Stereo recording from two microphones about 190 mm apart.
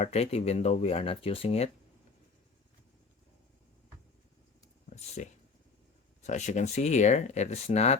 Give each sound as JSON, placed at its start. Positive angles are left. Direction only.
{"t": 0.0, "sound": "speech", "side_deg": 35}
{"t": 4.9, "sound": "speech", "side_deg": 35}